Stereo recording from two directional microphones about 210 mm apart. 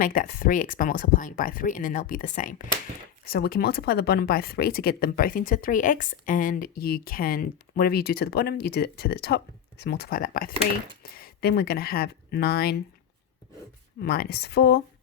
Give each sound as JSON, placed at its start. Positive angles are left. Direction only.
{"t": 0.0, "sound": "speech", "side_deg": 40}
{"t": 14.0, "sound": "speech", "side_deg": 50}